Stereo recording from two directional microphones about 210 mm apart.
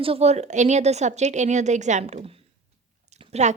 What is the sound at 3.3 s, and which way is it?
Speech, 35° right (ahead or behind).